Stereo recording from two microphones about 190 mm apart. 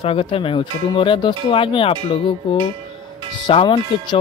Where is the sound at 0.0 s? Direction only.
30° left (ahead or behind).